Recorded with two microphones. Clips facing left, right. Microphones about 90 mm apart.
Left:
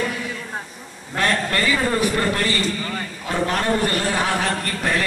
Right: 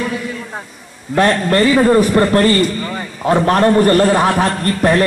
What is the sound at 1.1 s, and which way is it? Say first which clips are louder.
A man's voice: right 8 dB; 35° right (ahead or behind).